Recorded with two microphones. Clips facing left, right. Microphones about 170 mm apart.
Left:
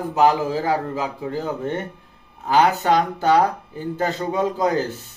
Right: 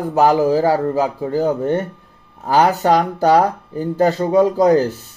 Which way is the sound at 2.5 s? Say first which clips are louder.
Right 3 dB; 40° right (ahead or behind).